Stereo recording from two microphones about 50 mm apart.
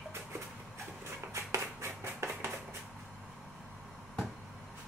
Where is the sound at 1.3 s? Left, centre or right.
Right.